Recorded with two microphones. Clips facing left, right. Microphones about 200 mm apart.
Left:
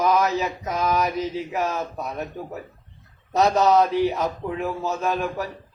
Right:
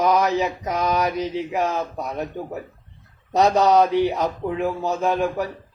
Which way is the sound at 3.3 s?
15° right (ahead or behind).